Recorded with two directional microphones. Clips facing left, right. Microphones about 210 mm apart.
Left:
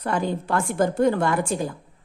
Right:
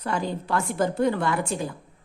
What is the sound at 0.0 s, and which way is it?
Speech, 50° left (ahead or behind).